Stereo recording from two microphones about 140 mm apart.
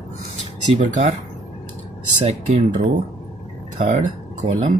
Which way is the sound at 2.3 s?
45° right (ahead or behind).